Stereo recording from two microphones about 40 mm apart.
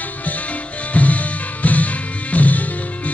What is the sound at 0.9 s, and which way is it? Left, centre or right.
Music, left.